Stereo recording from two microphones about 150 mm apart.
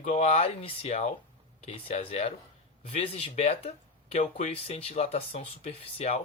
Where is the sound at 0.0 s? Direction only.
45° left (ahead or behind).